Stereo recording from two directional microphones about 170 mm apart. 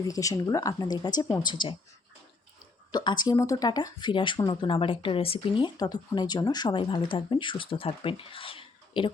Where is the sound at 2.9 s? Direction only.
25° left (ahead or behind).